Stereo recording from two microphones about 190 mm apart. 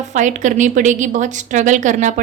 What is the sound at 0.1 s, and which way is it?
A woman's voice, 40° right (ahead or behind).